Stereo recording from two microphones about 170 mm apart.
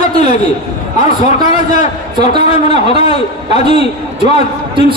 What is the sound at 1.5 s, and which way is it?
A man's voice, 45° left (ahead or behind).